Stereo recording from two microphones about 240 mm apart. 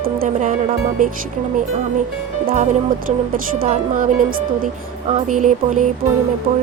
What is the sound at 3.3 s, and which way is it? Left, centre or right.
A woman's voice, right.